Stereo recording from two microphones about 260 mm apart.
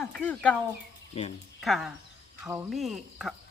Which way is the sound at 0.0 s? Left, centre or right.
Centre.